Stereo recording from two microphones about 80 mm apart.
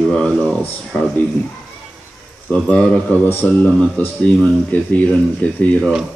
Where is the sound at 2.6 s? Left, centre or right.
Centre.